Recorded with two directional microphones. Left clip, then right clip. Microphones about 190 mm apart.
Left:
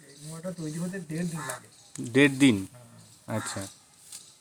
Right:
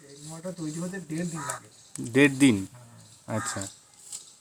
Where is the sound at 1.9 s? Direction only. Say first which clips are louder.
Right 1 dB; centre (ahead or behind).